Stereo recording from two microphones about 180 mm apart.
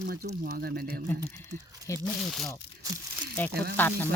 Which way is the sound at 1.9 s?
15° left (ahead or behind).